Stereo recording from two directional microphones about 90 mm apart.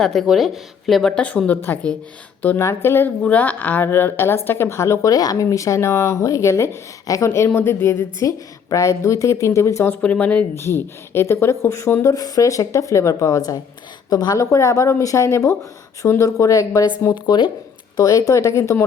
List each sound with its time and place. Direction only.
0.0 s speech: centre (ahead or behind)
2.6 s a woman's voice: 30° left (ahead or behind)
10.5 s speech: 25° left (ahead or behind)
12.0 s a woman's voice: 40° left (ahead or behind)
17.9 s a woman's voice: 45° left (ahead or behind)